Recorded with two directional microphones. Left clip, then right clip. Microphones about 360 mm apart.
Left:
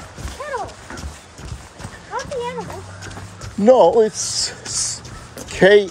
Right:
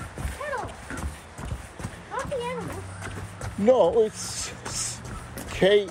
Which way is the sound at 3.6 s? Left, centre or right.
Left.